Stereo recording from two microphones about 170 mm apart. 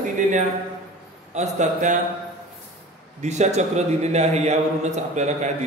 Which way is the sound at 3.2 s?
45° right (ahead or behind).